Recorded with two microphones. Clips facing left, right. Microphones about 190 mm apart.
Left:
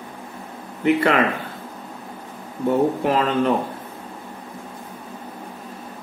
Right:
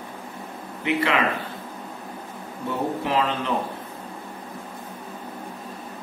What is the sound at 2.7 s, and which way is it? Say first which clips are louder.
Speech: left 7 dB; 45° left (ahead or behind).